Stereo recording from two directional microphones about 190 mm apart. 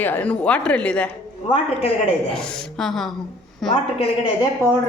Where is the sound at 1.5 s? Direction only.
30° left (ahead or behind).